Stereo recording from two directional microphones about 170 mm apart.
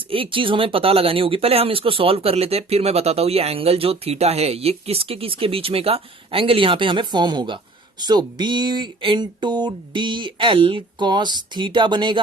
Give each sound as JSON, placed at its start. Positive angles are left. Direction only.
{"t": 0.1, "sound": "speech", "side_deg": -30}